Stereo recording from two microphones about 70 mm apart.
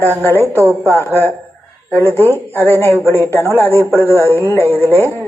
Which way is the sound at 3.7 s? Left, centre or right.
Right.